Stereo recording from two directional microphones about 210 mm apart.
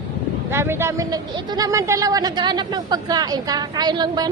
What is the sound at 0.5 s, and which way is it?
Speech, 10° right (ahead or behind).